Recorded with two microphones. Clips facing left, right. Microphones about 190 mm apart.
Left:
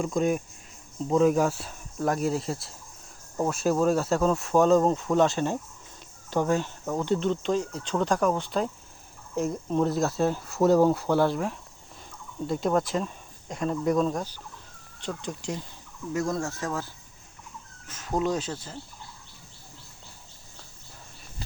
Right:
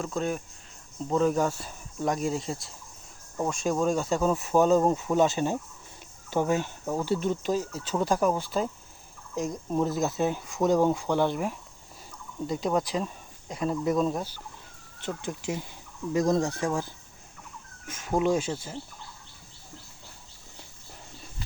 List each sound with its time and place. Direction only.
0.0 s speech: 10° left (ahead or behind)
12.5 s speech: centre (ahead or behind)
16.1 s speech: 15° right (ahead or behind)